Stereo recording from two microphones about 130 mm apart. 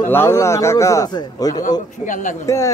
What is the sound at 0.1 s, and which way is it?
A man's voice, 20° left (ahead or behind).